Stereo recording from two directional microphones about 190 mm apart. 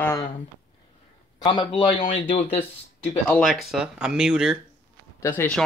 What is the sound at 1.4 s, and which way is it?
Speech, 25° left (ahead or behind).